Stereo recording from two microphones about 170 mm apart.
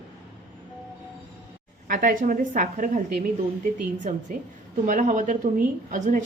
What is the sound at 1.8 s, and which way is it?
A woman's voice, 50° right (ahead or behind).